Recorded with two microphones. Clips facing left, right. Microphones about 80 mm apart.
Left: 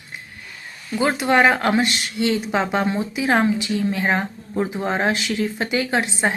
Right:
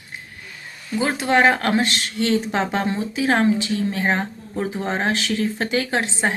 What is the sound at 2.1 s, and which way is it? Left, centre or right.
Speech, right.